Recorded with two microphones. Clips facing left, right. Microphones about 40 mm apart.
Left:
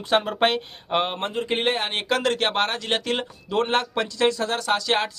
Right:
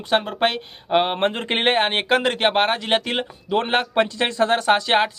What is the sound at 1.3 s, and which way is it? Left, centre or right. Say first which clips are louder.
Speech: right 3 dB; right.